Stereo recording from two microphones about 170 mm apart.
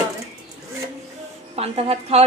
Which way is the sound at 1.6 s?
35° right (ahead or behind).